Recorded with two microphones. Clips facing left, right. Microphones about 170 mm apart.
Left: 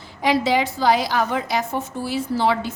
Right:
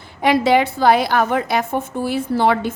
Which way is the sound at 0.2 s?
60° right (ahead or behind).